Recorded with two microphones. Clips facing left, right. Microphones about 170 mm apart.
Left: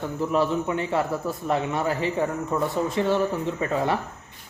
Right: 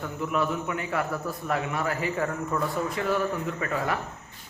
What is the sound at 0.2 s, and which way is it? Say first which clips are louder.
Speech: left 4 dB; 30° left (ahead or behind).